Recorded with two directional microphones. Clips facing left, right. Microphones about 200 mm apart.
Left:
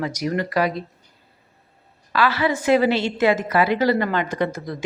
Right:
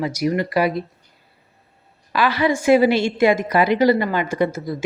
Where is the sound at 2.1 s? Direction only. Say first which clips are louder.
Right 2 dB; 15° right (ahead or behind).